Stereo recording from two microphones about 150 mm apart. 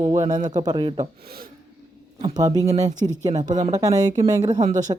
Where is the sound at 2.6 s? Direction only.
45° right (ahead or behind).